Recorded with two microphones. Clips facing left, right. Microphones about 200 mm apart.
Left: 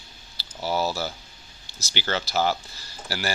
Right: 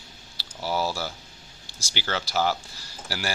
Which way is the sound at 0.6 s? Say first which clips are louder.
Left 2 dB; 20° left (ahead or behind).